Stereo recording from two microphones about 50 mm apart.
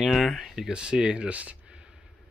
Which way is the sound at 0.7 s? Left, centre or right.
Centre.